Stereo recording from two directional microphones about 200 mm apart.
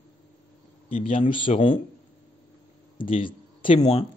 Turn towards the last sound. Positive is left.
turn(degrees=30)  # may be behind; listen again after turning